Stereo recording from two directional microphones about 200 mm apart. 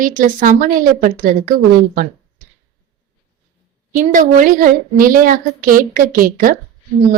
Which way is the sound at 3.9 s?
40° right (ahead or behind).